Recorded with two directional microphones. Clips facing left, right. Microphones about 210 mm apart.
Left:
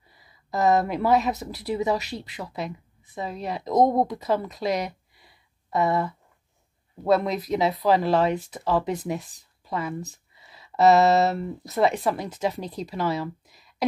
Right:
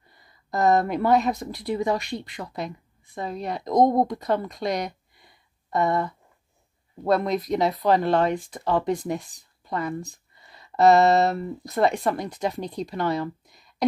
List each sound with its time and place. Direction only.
0.1 s speech: 5° left (ahead or behind)